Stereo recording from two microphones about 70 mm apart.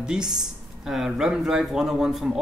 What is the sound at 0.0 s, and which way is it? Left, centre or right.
A man's voice, centre.